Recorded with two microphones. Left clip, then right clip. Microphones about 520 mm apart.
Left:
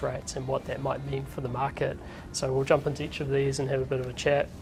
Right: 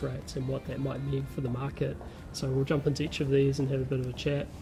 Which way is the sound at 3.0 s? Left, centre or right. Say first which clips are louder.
Right 1 dB; left.